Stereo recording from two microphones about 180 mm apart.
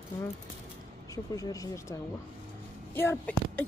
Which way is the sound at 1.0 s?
20° left (ahead or behind).